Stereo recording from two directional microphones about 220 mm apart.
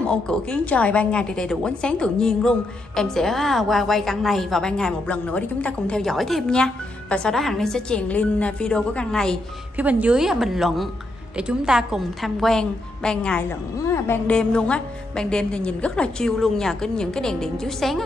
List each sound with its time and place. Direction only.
0.0 s a woman's voice: 5° left (ahead or behind)